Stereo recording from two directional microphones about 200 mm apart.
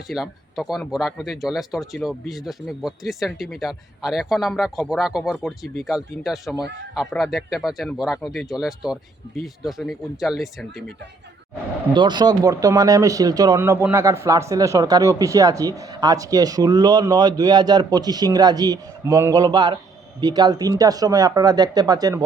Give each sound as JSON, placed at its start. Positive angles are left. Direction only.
{"t": 0.1, "sound": "speech", "side_deg": 0}
{"t": 11.9, "sound": "speech", "side_deg": -20}